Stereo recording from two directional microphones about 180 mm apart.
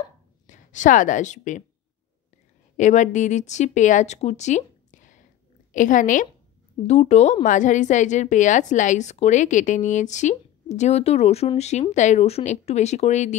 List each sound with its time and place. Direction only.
0.5 s a woman's voice: 45° left (ahead or behind)
2.8 s a woman's voice: 40° left (ahead or behind)